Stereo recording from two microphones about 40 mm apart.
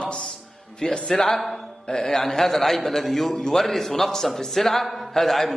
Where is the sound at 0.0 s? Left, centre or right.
Left.